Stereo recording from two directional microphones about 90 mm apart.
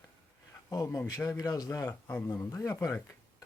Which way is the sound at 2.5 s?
35° left (ahead or behind).